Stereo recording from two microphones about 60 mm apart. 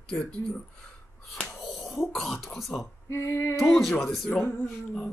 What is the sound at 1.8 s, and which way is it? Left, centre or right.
Speech, centre.